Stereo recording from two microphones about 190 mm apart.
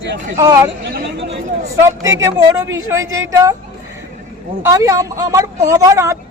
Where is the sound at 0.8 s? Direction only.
65° right (ahead or behind).